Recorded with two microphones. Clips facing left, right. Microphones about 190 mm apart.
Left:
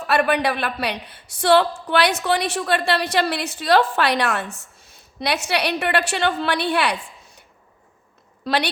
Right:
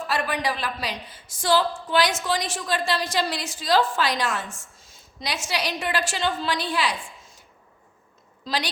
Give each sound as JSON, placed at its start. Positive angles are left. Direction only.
{"t": 0.1, "sound": "a woman's voice", "side_deg": 65}
{"t": 8.4, "sound": "a woman's voice", "side_deg": 65}